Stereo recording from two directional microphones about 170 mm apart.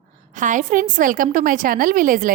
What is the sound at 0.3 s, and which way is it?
A woman's voice, 50° right (ahead or behind).